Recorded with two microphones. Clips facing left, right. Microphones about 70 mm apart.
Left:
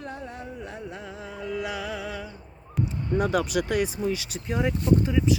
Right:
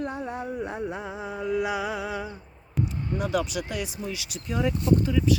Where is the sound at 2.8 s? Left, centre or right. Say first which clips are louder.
Even; centre.